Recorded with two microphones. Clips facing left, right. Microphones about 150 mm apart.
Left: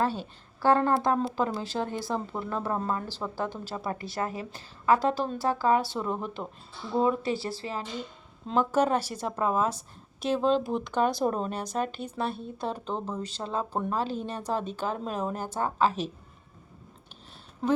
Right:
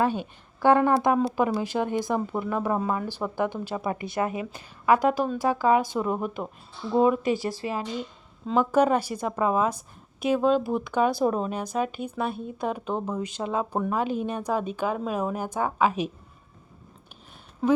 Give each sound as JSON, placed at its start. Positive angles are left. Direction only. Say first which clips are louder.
{"t": 0.0, "sound": "speech", "louder": "right 3 dB", "side_deg": -15}